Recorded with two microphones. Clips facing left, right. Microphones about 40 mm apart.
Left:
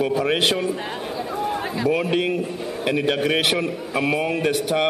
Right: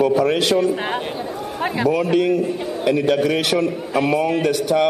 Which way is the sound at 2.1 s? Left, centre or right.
Left.